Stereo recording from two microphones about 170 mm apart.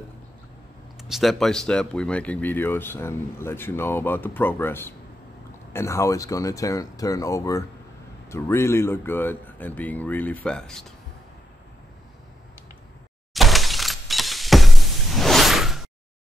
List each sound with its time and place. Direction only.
0.9 s speech: centre (ahead or behind)
13.3 s shatter: centre (ahead or behind)